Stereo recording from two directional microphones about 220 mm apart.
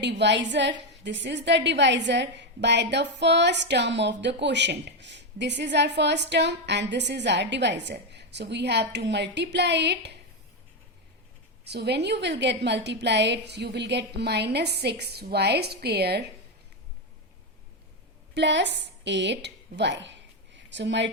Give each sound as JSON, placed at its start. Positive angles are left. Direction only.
{"t": 0.0, "sound": "a woman's voice", "side_deg": -50}
{"t": 11.6, "sound": "a woman's voice", "side_deg": -50}
{"t": 18.3, "sound": "a woman's voice", "side_deg": -55}